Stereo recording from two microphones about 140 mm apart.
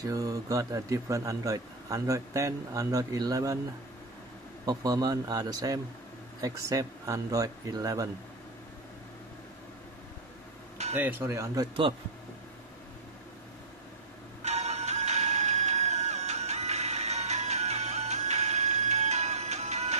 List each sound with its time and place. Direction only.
0.0 s a man's voice: 25° right (ahead or behind)
4.6 s a man's voice: 25° right (ahead or behind)
11.0 s speech: 15° right (ahead or behind)
14.4 s music: 50° right (ahead or behind)